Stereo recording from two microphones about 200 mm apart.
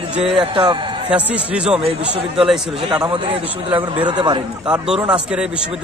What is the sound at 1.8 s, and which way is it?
Speech, 30° right (ahead or behind).